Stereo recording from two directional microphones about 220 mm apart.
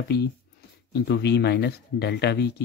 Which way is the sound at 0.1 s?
45° left (ahead or behind).